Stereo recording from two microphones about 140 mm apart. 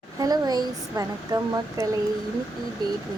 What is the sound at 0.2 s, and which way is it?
Speech, 30° right (ahead or behind).